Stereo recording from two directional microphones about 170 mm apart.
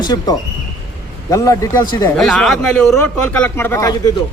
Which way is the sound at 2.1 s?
Centre (ahead or behind).